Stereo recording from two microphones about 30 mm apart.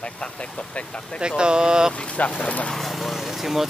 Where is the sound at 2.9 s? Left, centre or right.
Centre.